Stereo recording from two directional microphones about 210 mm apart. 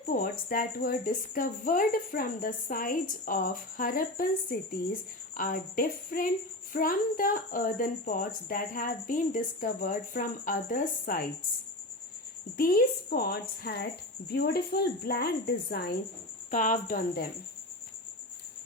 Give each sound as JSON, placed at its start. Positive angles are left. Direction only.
{"t": 0.1, "sound": "a woman's voice", "side_deg": 45}
{"t": 12.5, "sound": "a woman's voice", "side_deg": 45}